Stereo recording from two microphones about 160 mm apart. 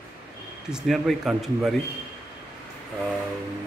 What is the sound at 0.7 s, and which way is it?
Speech, centre (ahead or behind).